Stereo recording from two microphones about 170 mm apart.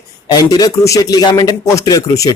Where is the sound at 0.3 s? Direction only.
25° left (ahead or behind).